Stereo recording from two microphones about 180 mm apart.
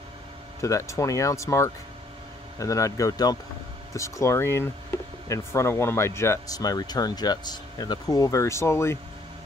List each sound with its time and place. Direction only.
0.6 s speech: 15° left (ahead or behind)